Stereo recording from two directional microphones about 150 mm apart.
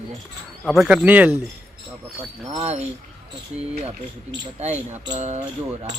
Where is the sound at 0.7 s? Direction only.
5° right (ahead or behind).